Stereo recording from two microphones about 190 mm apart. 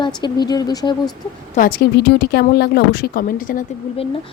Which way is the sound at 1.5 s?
50° left (ahead or behind).